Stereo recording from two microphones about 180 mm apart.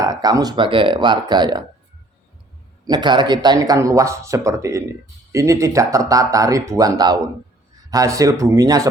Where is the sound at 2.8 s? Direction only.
25° right (ahead or behind).